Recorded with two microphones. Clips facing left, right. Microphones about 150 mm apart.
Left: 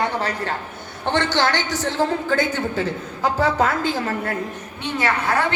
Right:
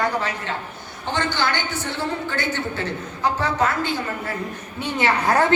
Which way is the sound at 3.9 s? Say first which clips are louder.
Left 3 dB; 85° left.